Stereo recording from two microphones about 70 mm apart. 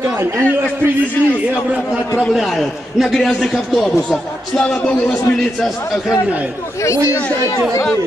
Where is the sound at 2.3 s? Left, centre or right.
Centre.